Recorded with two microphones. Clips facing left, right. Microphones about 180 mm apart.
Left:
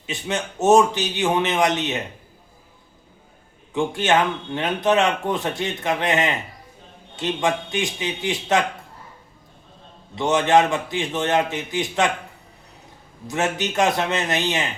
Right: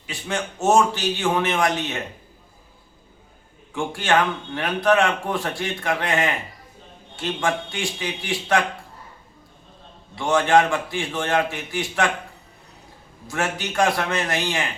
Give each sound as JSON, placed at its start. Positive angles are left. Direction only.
{"t": 0.0, "sound": "speech", "side_deg": 20}
{"t": 3.7, "sound": "speech", "side_deg": 20}
{"t": 10.2, "sound": "speech", "side_deg": 20}
{"t": 13.2, "sound": "speech", "side_deg": 20}